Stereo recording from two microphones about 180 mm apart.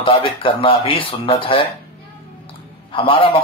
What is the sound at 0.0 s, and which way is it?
A man's voice, 30° left (ahead or behind).